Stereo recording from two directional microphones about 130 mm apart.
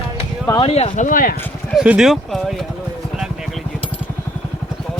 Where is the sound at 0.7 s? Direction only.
60° left (ahead or behind); by 1.3 s 90° left.